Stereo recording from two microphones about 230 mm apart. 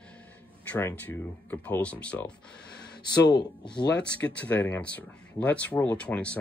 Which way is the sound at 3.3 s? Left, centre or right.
Centre.